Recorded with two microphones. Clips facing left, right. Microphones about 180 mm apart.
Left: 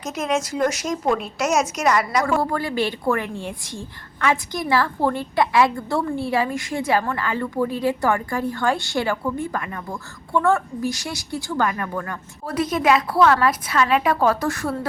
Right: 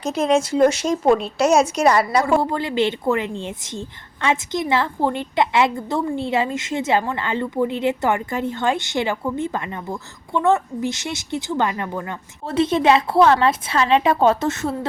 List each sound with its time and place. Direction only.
0.0 s speech: 30° right (ahead or behind)
2.2 s a woman's voice: 20° right (ahead or behind)